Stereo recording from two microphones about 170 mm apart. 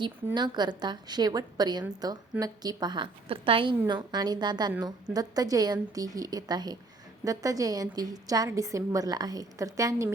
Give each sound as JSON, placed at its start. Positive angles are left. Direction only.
{"t": 0.3, "sound": "a woman's voice", "side_deg": -25}